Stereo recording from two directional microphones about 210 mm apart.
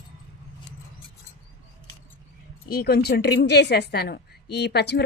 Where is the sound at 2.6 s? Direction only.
50° left (ahead or behind).